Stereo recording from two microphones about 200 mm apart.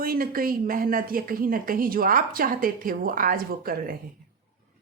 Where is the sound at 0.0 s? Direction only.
45° right (ahead or behind).